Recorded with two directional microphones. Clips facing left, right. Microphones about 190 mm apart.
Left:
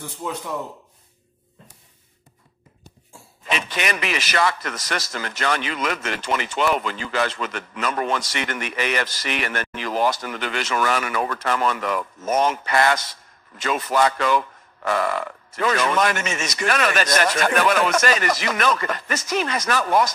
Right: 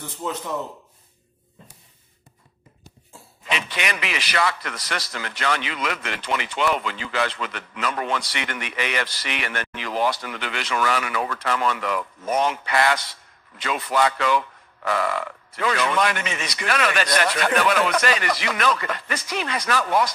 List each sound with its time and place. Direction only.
3.4 s a man's voice: 45° left (ahead or behind)